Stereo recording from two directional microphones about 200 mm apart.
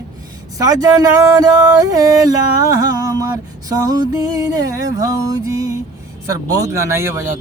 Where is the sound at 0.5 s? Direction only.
20° right (ahead or behind).